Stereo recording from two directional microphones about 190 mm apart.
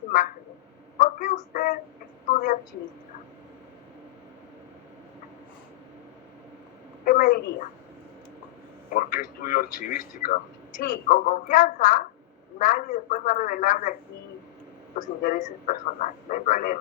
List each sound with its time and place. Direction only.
0.1 s a sound: 45° left (ahead or behind)
7.0 s a woman's voice: 45° left (ahead or behind)
8.9 s a man's voice: 45° left (ahead or behind)
14.9 s speech: 45° left (ahead or behind)